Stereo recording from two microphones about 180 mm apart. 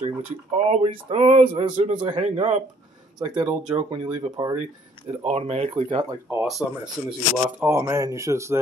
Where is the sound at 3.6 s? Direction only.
30° right (ahead or behind).